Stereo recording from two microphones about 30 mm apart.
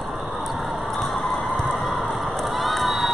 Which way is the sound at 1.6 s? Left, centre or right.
Centre.